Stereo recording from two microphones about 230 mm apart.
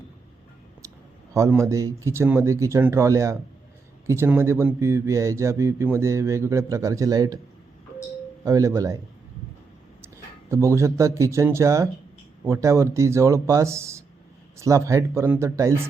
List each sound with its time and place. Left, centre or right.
1.3 s speech: centre
8.4 s speech: centre
10.5 s speech: centre